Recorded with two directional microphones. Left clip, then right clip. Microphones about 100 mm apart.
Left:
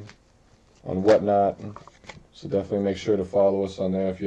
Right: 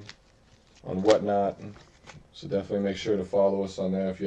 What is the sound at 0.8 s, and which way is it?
Speech, 10° right (ahead or behind).